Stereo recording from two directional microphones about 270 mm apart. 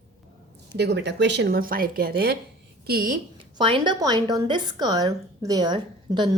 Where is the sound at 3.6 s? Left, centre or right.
Centre.